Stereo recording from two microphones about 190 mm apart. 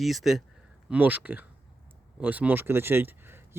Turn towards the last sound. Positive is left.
turn(degrees=-10)  # may be behind; listen again after turning